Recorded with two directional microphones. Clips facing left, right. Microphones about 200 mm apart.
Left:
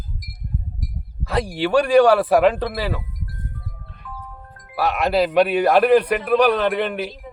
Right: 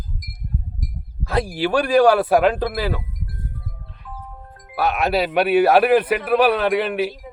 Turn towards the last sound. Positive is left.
turn(degrees=-5)  # may be behind; listen again after turning